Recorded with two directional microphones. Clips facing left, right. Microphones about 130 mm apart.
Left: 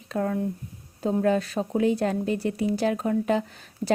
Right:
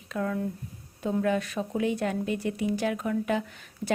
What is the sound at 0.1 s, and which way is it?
Speech, 40° left (ahead or behind).